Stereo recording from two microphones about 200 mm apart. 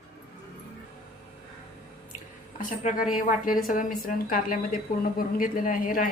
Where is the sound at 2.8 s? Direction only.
35° left (ahead or behind).